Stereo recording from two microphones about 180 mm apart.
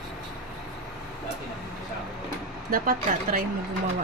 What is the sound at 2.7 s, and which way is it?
Speech, 55° right (ahead or behind).